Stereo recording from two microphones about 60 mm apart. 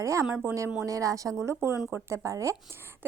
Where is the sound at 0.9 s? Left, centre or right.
Right.